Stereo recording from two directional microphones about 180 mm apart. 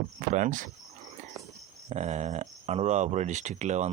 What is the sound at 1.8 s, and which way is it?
Speech, 40° right (ahead or behind).